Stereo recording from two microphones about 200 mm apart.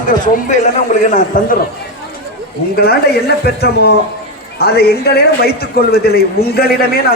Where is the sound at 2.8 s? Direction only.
50° left (ahead or behind).